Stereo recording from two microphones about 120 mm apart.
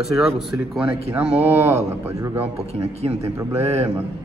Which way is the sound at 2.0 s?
20° right (ahead or behind).